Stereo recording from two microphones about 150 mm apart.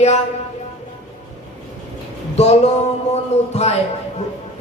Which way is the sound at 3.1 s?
45° left (ahead or behind).